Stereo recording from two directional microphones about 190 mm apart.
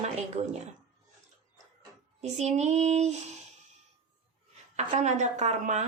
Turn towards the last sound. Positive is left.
turn(degrees=-35)  # may be behind; listen again after turning